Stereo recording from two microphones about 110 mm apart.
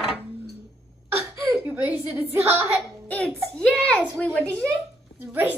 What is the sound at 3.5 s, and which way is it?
Speech, 10° left (ahead or behind).